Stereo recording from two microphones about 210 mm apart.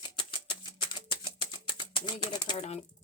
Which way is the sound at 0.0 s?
20° left (ahead or behind).